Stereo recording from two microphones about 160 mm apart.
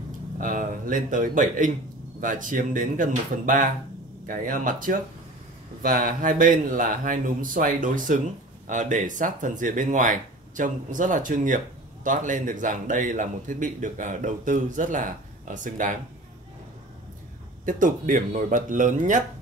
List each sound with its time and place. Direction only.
0.4 s speech: 60° right (ahead or behind)
17.6 s speech: 55° right (ahead or behind)